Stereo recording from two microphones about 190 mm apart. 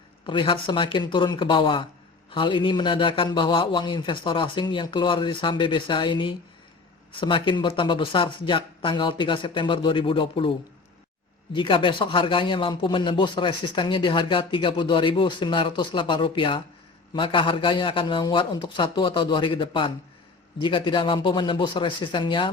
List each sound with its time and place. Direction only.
0.3 s a man's voice: 25° left (ahead or behind)
11.5 s a man's voice: 25° left (ahead or behind)